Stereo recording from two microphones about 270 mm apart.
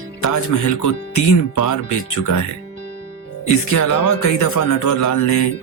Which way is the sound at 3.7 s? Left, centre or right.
Left.